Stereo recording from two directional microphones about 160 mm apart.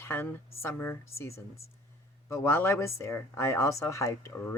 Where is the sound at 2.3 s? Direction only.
15° left (ahead or behind).